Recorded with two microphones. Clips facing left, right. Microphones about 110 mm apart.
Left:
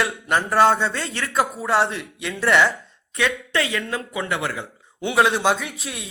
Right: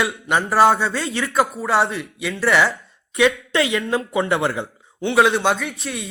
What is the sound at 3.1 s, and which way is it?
Speech, 20° right (ahead or behind).